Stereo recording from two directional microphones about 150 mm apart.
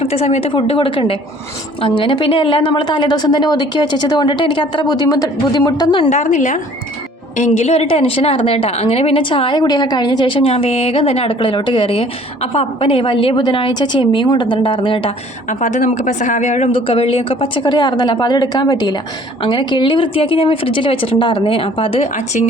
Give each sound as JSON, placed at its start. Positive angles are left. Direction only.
{"t": 0.0, "sound": "a woman's voice", "side_deg": 45}
{"t": 6.1, "sound": "speech", "side_deg": 50}
{"t": 10.5, "sound": "speech", "side_deg": 45}
{"t": 15.4, "sound": "speech", "side_deg": 55}
{"t": 16.8, "sound": "speech", "side_deg": 40}